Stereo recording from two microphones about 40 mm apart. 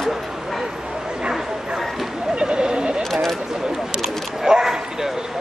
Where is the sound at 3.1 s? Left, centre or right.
Centre.